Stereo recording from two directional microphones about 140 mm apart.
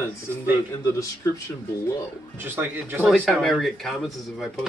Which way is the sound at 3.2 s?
Centre (ahead or behind).